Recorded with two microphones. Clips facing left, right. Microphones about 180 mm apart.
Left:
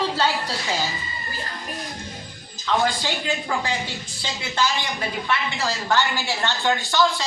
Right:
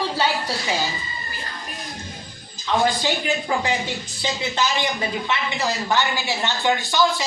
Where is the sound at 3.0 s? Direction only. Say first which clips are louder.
Right 3 dB; 15° right (ahead or behind).